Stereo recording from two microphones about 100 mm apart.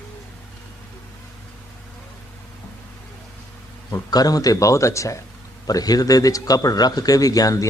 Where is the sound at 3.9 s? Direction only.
35° left (ahead or behind).